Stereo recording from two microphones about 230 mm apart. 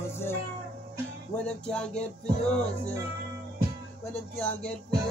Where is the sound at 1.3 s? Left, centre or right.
Centre.